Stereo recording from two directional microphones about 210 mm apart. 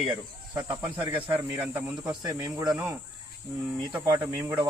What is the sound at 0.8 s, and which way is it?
Speech, 10° right (ahead or behind).